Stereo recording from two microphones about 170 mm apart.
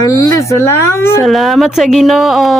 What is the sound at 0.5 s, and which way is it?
Speech, 15° left (ahead or behind).